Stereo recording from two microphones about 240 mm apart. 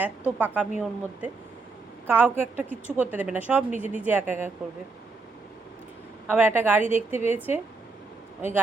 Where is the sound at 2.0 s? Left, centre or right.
Centre.